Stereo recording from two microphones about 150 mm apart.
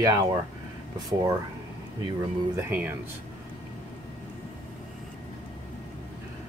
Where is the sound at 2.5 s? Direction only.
10° right (ahead or behind).